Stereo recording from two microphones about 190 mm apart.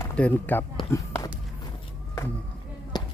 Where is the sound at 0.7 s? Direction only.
15° left (ahead or behind).